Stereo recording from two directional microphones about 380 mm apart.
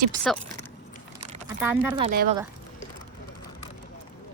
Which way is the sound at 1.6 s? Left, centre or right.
Centre.